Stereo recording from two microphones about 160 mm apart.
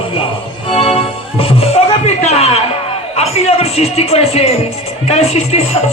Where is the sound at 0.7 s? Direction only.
35° left (ahead or behind).